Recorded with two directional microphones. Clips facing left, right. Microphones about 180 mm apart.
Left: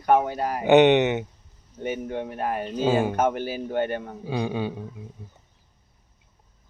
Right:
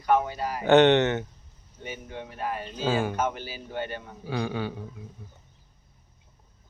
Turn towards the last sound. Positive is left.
turn(degrees=20)  # may be behind; listen again after turning